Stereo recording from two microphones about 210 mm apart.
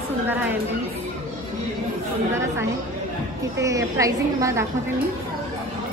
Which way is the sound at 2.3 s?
15° right (ahead or behind).